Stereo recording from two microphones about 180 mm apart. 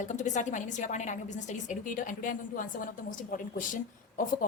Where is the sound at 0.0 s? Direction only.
40° left (ahead or behind).